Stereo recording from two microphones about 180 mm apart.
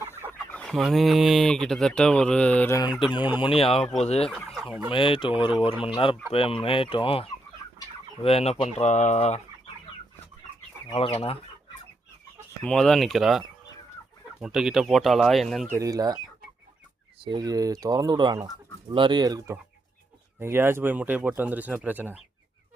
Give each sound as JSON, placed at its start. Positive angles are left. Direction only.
{"t": 0.3, "sound": "speech", "side_deg": 5}
{"t": 3.3, "sound": "speech", "side_deg": 30}
{"t": 4.3, "sound": "speech", "side_deg": 0}
{"t": 4.9, "sound": "fowl", "side_deg": 30}
{"t": 7.8, "sound": "speech", "side_deg": 30}
{"t": 10.9, "sound": "speech", "side_deg": 30}
{"t": 12.6, "sound": "speech", "side_deg": 5}
{"t": 15.7, "sound": "speech", "side_deg": -20}
{"t": 17.2, "sound": "speech", "side_deg": -20}